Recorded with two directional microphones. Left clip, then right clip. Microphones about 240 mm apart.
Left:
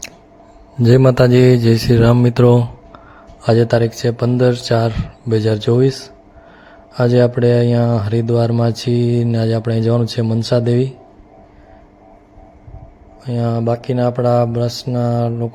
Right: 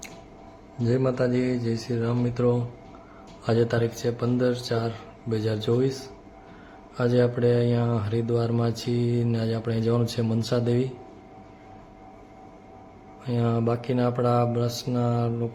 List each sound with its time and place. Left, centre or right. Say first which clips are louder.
0.9 s speech: left 13 dB; left
6.9 s speech: left 9 dB; left
13.2 s speech: left 7 dB; centre